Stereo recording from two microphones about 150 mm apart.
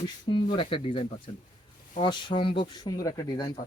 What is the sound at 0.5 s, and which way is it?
Speech, 35° left (ahead or behind).